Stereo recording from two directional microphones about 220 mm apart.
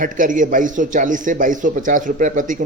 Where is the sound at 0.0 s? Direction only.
35° right (ahead or behind).